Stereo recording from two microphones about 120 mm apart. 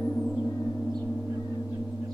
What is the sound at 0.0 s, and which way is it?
Gong, centre (ahead or behind).